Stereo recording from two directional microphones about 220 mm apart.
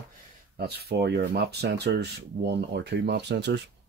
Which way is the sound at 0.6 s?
45° right (ahead or behind).